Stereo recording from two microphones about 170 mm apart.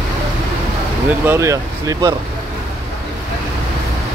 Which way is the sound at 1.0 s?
15° right (ahead or behind).